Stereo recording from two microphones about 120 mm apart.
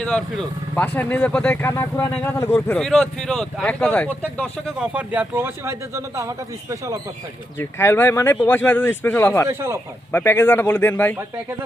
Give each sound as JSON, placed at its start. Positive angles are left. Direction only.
{"t": 0.0, "sound": "speech", "side_deg": 10}
{"t": 1.7, "sound": "speech", "side_deg": 20}
{"t": 2.7, "sound": "speech", "side_deg": 5}
{"t": 4.8, "sound": "speech", "side_deg": -10}
{"t": 7.6, "sound": "speech", "side_deg": 20}
{"t": 9.5, "sound": "speech", "side_deg": -20}
{"t": 10.1, "sound": "speech", "side_deg": 15}